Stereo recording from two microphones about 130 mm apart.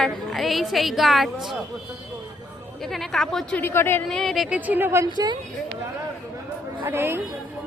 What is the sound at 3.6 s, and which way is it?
Speech, 15° left (ahead or behind).